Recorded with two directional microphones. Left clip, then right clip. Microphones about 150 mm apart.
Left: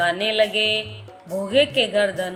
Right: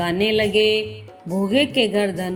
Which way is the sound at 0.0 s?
45° right (ahead or behind).